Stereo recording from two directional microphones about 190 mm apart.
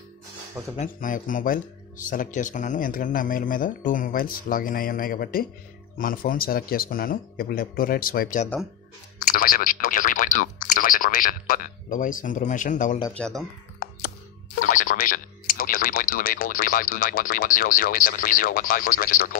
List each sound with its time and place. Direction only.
0.7 s speech: 45° left (ahead or behind)
13.2 s speech: centre (ahead or behind)
14.6 s a sound: 45° left (ahead or behind)